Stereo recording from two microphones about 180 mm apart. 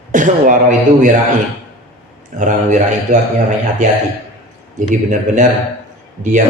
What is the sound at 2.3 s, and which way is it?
Speech, 45° right (ahead or behind).